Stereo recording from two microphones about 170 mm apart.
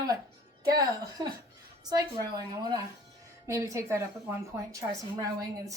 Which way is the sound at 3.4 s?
15° right (ahead or behind).